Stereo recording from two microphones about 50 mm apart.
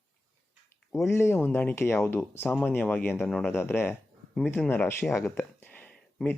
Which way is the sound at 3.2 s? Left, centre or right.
Centre.